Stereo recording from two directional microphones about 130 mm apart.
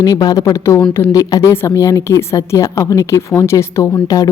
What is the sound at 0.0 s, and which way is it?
A woman's voice, 30° left (ahead or behind).